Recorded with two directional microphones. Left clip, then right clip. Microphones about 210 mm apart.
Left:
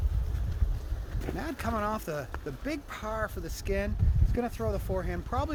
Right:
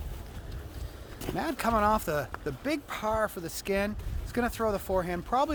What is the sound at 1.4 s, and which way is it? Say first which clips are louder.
Speech: right 6 dB; 30° right (ahead or behind).